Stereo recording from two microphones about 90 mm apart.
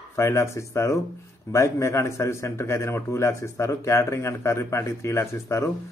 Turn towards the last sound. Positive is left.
turn(degrees=30)  # may be behind; listen again after turning